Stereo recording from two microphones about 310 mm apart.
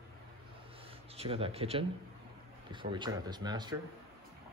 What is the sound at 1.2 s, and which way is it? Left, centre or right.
Speech, centre.